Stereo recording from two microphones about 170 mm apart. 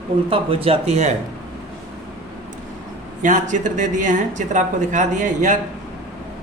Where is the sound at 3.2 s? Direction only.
50° right (ahead or behind).